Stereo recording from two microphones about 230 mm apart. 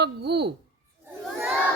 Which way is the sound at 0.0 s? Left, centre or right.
Right.